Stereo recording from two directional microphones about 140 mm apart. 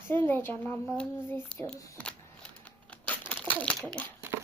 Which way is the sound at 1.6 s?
5° left (ahead or behind).